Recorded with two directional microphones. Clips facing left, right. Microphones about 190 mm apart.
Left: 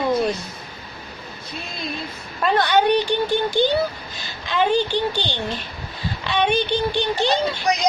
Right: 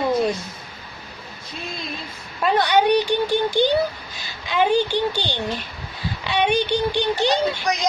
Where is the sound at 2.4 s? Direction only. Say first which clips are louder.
Even; 10° right (ahead or behind).